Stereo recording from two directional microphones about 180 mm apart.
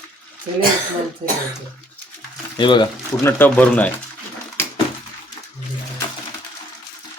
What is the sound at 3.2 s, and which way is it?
Speech, 15° left (ahead or behind).